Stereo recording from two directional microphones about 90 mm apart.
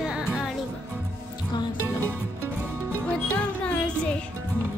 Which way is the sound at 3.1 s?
10° left (ahead or behind).